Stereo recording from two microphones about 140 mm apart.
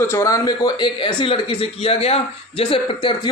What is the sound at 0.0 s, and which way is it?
A man's voice, 20° left (ahead or behind).